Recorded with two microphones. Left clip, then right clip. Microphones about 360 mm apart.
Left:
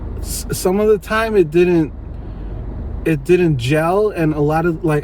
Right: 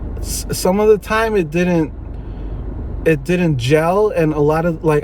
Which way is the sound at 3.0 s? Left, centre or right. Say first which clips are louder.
Left 1 dB; centre.